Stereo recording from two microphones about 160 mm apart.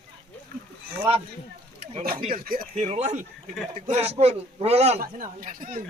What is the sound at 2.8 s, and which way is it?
Speech, 45° right (ahead or behind).